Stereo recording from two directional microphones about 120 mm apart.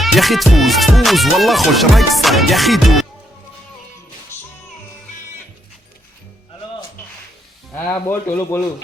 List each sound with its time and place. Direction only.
0.0 s music: centre (ahead or behind)
7.8 s a man's voice: 10° left (ahead or behind)